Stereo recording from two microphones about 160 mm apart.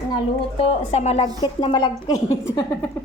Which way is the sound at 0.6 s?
40° left (ahead or behind).